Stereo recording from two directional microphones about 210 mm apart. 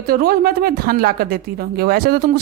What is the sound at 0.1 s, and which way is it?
Speech, 45° right (ahead or behind).